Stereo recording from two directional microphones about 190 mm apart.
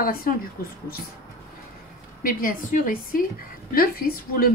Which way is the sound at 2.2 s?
45° left (ahead or behind).